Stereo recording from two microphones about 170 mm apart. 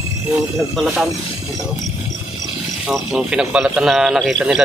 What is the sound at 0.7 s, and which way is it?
Speech, centre (ahead or behind).